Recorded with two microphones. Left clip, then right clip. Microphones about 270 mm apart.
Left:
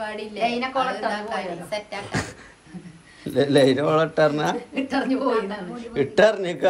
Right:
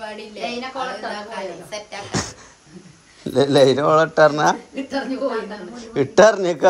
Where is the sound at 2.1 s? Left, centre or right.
Centre.